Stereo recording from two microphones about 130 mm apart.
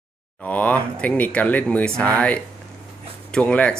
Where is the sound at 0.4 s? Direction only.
10° left (ahead or behind).